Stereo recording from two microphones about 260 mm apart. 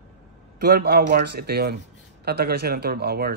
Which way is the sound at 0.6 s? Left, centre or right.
Right.